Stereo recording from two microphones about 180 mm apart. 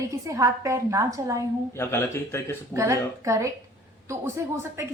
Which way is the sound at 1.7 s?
15° left (ahead or behind).